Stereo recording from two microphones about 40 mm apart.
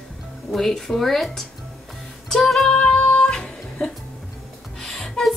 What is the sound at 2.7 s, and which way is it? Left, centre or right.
Music, left.